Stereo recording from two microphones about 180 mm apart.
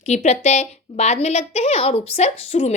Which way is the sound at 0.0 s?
40° left (ahead or behind).